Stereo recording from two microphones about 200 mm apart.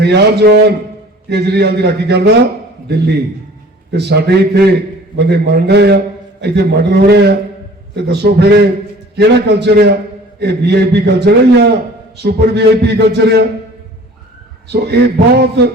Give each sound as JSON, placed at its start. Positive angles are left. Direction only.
{"t": 0.0, "sound": "a man's voice", "side_deg": -55}
{"t": 14.7, "sound": "a man's voice", "side_deg": -55}